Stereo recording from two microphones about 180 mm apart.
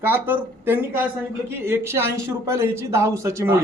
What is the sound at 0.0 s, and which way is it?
A man's voice, 10° right (ahead or behind).